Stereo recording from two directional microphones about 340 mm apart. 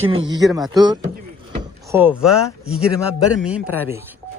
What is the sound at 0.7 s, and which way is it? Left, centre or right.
Speech, centre.